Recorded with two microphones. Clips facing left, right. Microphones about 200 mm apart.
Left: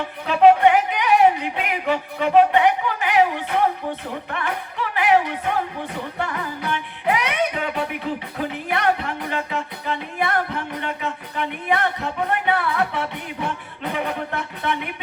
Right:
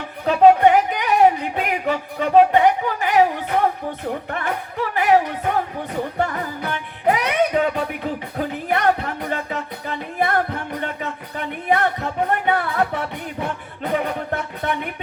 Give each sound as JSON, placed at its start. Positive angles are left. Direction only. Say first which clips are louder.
{"t": 0.3, "sound": "music", "louder": "right 1 dB", "side_deg": -40}
{"t": 4.3, "sound": "music", "louder": "right 2 dB", "side_deg": -40}
{"t": 14.3, "sound": "music", "louder": "right 2 dB", "side_deg": -45}